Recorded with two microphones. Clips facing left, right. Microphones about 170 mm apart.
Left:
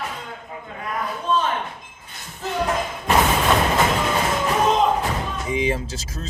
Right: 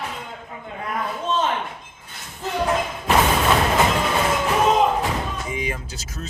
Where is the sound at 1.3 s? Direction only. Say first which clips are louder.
Left 2 dB; 20° right (ahead or behind).